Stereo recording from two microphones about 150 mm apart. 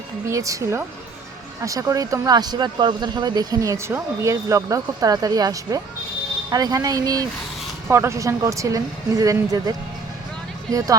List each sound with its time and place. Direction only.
0.3 s speech: 20° right (ahead or behind)